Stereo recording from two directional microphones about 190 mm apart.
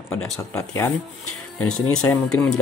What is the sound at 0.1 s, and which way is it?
Speech, 15° left (ahead or behind).